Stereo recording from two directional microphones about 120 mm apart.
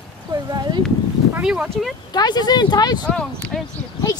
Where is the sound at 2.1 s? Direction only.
35° left (ahead or behind).